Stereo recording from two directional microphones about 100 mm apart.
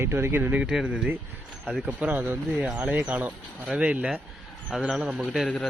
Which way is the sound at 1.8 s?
20° right (ahead or behind).